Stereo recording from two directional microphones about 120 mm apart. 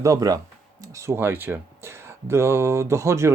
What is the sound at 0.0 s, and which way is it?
Speech, 30° right (ahead or behind).